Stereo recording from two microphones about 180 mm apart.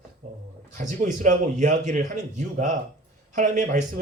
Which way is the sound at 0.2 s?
40° right (ahead or behind).